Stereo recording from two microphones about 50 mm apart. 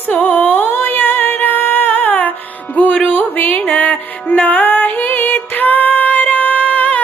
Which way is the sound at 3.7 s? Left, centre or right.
Left.